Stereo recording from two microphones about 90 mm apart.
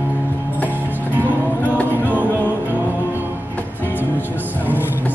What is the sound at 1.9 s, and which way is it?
Music, 20° right (ahead or behind).